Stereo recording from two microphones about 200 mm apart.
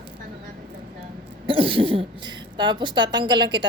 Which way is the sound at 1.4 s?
25° right (ahead or behind).